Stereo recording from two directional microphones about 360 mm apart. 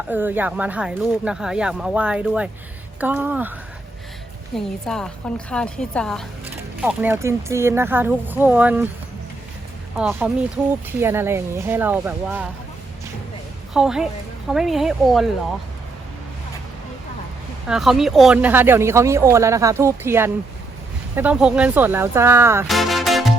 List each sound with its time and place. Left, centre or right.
0.1 s speech: centre
4.5 s speech: centre
10.0 s speech: centre
13.7 s speech: centre
17.7 s speech: centre